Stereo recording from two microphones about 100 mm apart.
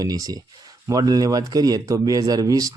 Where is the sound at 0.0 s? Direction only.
40° right (ahead or behind).